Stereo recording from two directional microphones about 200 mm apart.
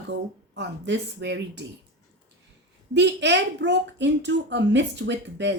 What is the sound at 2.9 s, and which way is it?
Speech, 60° right (ahead or behind).